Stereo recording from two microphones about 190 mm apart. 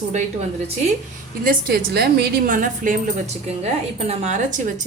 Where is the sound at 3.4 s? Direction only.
35° right (ahead or behind).